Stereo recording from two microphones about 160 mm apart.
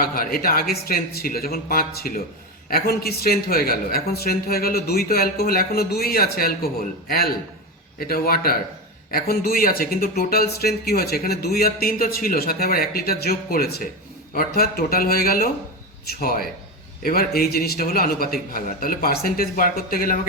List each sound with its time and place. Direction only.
0.0 s speech: 65° left (ahead or behind)